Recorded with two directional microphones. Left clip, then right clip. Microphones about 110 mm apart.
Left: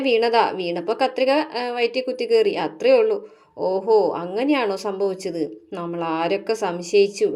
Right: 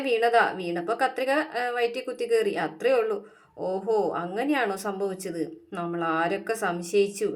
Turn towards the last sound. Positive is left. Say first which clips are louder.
# left 7 dB
turn(degrees=20)  # may be behind; listen again after turning